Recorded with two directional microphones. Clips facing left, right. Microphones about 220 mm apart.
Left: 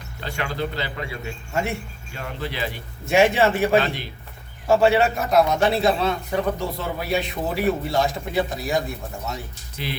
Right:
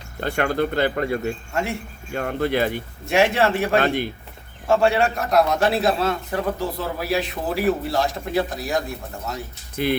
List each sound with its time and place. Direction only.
0.2 s speech: 55° right (ahead or behind)
3.1 s a man's voice: centre (ahead or behind)
3.8 s speech: 50° right (ahead or behind)
4.7 s a man's voice: centre (ahead or behind)
9.7 s speech: 55° right (ahead or behind)